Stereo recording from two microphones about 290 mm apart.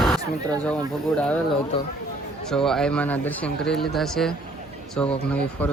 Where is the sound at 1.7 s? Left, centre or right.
Centre.